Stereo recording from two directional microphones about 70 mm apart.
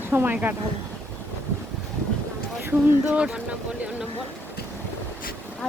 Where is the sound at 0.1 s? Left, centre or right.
Right.